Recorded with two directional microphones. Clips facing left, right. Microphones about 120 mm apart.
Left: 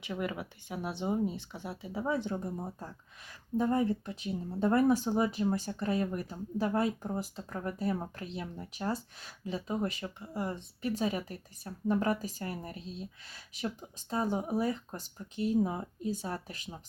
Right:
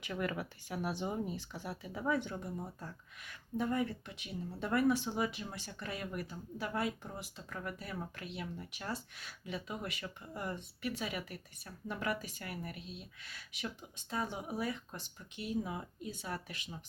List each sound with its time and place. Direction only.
0.0 s speech: 20° left (ahead or behind); by 16.6 s 35° left (ahead or behind)